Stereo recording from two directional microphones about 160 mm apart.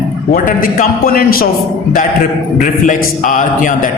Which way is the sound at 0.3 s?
55° left (ahead or behind).